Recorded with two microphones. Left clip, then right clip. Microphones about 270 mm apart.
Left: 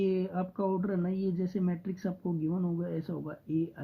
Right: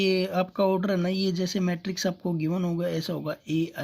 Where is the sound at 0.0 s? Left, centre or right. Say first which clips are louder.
Right 7 dB; right.